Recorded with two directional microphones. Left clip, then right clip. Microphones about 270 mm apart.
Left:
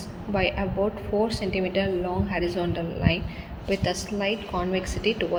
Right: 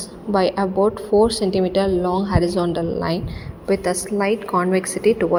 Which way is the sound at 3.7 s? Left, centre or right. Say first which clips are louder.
Right 7 dB; right.